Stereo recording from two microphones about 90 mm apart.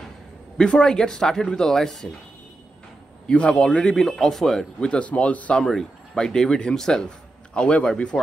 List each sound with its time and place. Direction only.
0.6 s a man's voice: 5° left (ahead or behind)
3.3 s a man's voice: 10° left (ahead or behind)